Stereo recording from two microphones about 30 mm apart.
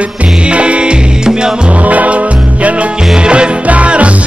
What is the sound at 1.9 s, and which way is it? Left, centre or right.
Music, right.